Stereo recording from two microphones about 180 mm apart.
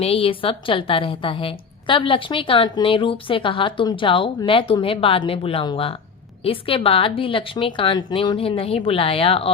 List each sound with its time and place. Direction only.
0.0 s a woman's voice: 30° left (ahead or behind)